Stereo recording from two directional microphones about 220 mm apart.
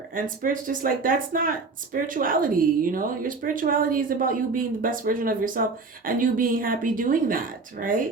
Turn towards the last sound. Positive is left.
turn(degrees=-40)  # may be behind; listen again after turning